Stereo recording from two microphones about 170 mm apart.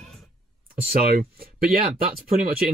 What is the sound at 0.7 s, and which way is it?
Speech, 60° right (ahead or behind).